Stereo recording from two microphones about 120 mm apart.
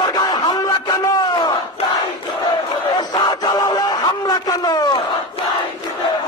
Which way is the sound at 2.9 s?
40° left (ahead or behind).